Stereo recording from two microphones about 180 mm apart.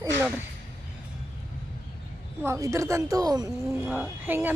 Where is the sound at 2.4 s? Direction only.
15° right (ahead or behind).